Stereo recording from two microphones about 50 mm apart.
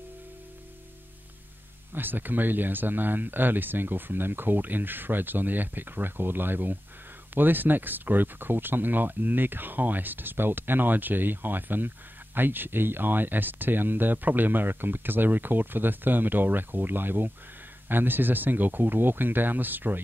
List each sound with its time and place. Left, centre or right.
1.9 s speech: right